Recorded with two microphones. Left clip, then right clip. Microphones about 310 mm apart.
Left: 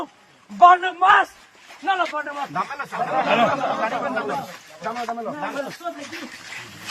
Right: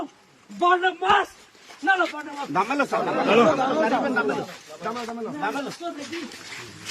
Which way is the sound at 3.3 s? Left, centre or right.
Centre.